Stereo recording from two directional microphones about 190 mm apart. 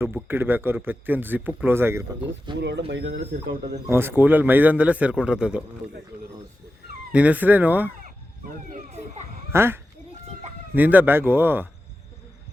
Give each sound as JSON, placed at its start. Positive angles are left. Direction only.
{"t": 0.3, "sound": "a man's voice", "side_deg": -10}
{"t": 2.6, "sound": "speech", "side_deg": -65}
{"t": 3.8, "sound": "a man's voice", "side_deg": -10}
{"t": 7.1, "sound": "a man's voice", "side_deg": -5}
{"t": 8.0, "sound": "a sound", "side_deg": -45}
{"t": 9.5, "sound": "a man's voice", "side_deg": -10}